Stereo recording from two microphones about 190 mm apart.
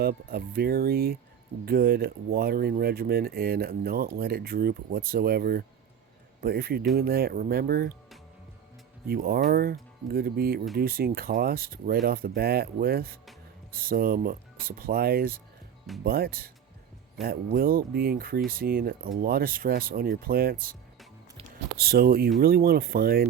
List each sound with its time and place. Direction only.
0.0 s speech: 55° right (ahead or behind)
9.0 s speech: 55° right (ahead or behind)
21.8 s speech: 55° right (ahead or behind)